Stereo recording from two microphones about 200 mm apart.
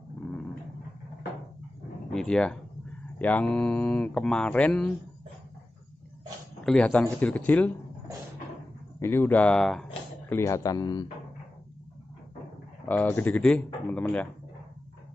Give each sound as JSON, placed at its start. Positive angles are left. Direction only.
{"t": 2.1, "sound": "speech", "side_deg": 5}
{"t": 6.6, "sound": "speech", "side_deg": 5}
{"t": 9.0, "sound": "speech", "side_deg": 10}
{"t": 10.3, "sound": "speech", "side_deg": 15}
{"t": 12.8, "sound": "speech", "side_deg": 10}